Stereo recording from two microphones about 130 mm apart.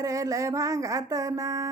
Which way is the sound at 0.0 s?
25° right (ahead or behind).